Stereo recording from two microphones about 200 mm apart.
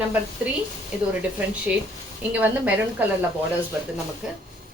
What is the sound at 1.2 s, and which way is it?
Speech, 5° right (ahead or behind).